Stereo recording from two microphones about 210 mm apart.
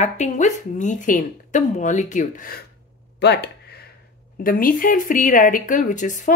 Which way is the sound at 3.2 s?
50° left (ahead or behind).